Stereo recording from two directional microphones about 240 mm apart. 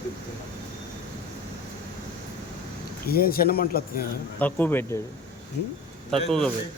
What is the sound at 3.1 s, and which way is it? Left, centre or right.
Speech, left.